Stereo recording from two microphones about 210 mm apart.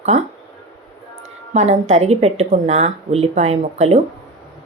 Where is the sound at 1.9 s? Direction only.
30° right (ahead or behind).